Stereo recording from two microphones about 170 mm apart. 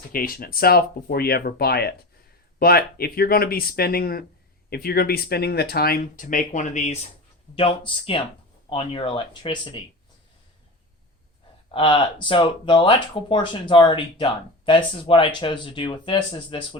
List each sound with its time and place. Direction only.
0.1 s speech: 55° left (ahead or behind)
7.5 s speech: 30° left (ahead or behind)
11.7 s speech: 30° left (ahead or behind)